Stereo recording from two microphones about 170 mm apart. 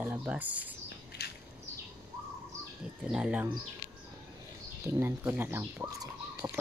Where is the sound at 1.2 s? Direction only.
65° left (ahead or behind).